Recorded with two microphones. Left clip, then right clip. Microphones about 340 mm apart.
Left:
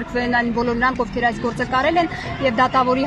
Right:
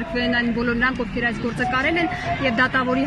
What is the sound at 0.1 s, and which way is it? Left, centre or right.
Speech, centre.